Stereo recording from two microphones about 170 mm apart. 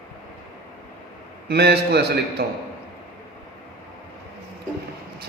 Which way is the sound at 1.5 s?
70° right (ahead or behind).